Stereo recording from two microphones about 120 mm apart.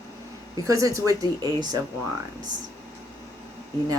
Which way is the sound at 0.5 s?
30° right (ahead or behind).